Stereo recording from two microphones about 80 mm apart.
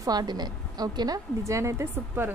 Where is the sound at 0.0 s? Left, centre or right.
Right.